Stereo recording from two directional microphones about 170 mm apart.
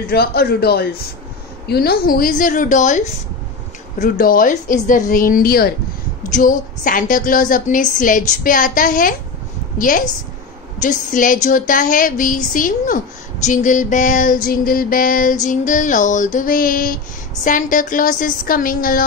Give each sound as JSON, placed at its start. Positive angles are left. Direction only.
{"t": 0.0, "sound": "a woman's voice", "side_deg": 70}
{"t": 4.0, "sound": "a woman's voice", "side_deg": 55}
{"t": 6.3, "sound": "a woman's voice", "side_deg": 50}